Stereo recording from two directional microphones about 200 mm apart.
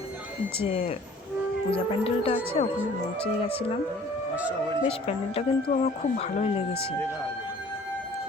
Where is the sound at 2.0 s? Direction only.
30° left (ahead or behind).